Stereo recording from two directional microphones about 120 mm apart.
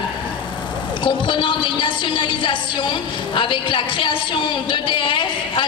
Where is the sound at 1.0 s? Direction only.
45° left (ahead or behind).